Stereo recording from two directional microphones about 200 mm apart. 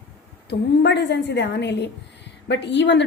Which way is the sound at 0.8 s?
55° left (ahead or behind).